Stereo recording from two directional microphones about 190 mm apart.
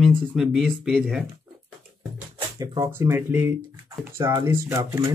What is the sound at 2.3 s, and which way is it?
Speech, 20° right (ahead or behind).